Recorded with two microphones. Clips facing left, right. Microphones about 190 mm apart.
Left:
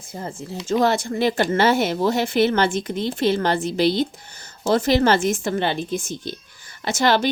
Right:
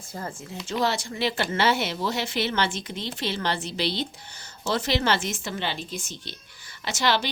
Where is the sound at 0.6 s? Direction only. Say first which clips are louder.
Left 7 dB; 50° left (ahead or behind).